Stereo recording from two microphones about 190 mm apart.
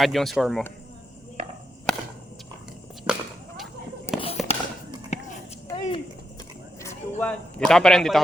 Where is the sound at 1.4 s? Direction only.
40° right (ahead or behind).